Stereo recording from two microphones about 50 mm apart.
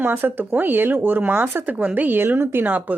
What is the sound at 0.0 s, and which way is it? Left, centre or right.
A woman's voice, right.